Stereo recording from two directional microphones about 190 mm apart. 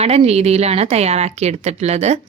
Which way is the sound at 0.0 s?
35° right (ahead or behind).